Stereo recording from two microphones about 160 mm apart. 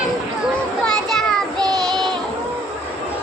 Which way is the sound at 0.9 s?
5° left (ahead or behind).